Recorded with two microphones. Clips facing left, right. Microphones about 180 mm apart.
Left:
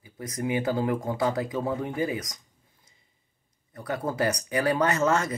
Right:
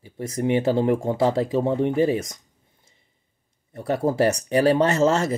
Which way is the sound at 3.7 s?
30° right (ahead or behind).